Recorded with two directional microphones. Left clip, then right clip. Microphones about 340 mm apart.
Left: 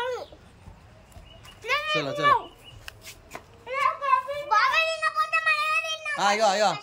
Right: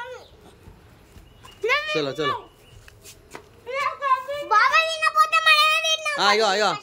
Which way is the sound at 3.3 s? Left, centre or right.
Centre.